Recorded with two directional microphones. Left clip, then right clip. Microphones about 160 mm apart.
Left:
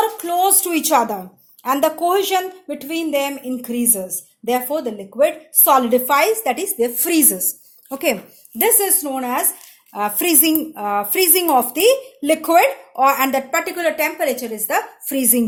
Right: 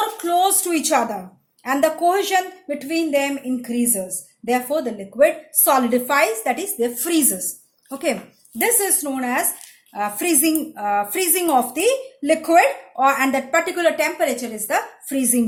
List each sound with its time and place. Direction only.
0.3 s a woman's voice: 40° left (ahead or behind)
9.9 s a woman's voice: 45° left (ahead or behind)